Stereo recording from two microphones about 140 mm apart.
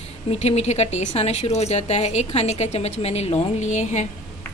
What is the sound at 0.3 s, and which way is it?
Speech, 50° left (ahead or behind).